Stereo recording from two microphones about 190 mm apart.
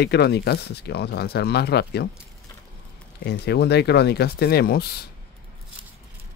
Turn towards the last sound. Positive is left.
turn(degrees=55)  # may be behind; listen again after turning